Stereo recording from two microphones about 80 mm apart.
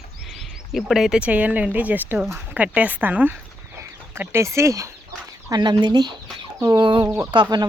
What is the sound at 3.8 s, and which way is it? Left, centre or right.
Speech, right.